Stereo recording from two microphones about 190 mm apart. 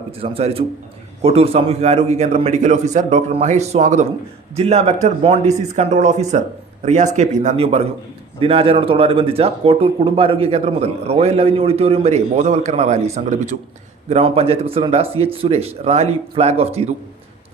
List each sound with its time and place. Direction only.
0.2 s speech: 30° right (ahead or behind)